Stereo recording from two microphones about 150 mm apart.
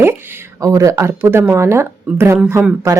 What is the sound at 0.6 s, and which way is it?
Speech, 20° right (ahead or behind).